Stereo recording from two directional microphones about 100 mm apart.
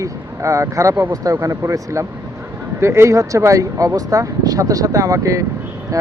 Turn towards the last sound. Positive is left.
turn(degrees=-35)  # may be behind; listen again after turning